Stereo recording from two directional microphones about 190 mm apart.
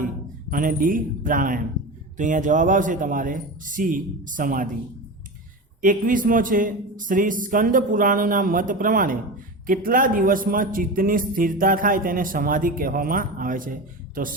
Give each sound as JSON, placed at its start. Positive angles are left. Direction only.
{"t": 0.5, "sound": "a man's voice", "side_deg": -45}
{"t": 5.8, "sound": "a man's voice", "side_deg": -45}